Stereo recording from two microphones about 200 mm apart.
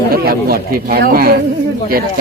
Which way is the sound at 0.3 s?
50° right (ahead or behind).